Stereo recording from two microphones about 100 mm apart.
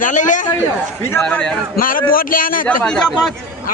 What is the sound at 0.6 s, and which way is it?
Speech, 25° left (ahead or behind).